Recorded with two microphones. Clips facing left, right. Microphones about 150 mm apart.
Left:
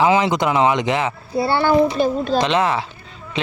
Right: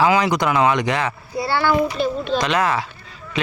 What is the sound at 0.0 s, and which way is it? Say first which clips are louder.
A child's voice: left 1 dB; 25° left (ahead or behind).